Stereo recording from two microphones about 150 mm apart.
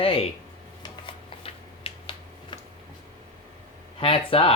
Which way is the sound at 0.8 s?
35° left (ahead or behind).